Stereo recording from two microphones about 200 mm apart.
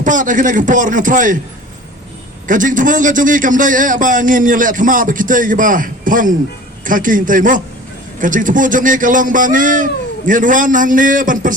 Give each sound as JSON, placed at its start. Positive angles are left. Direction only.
{"t": 0.0, "sound": "a man's voice", "side_deg": -40}
{"t": 2.5, "sound": "a man's voice", "side_deg": -40}